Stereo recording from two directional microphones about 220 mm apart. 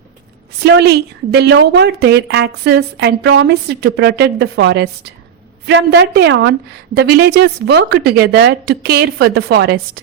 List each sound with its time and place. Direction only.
0.6 s a woman's voice: 50° right (ahead or behind)